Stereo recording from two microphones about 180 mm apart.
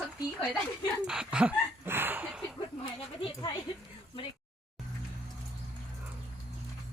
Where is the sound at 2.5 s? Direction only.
30° left (ahead or behind).